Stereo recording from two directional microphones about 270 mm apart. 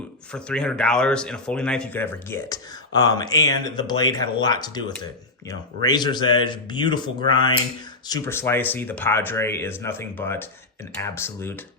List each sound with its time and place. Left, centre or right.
0.3 s speech: centre